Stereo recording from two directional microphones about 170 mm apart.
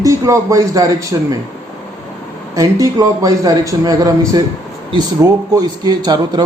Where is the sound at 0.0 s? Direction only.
20° right (ahead or behind).